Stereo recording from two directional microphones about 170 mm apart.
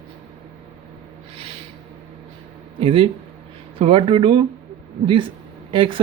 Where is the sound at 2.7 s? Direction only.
30° right (ahead or behind).